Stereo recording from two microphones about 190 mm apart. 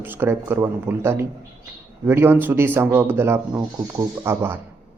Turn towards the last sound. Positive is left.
turn(degrees=-15)  # may be behind; listen again after turning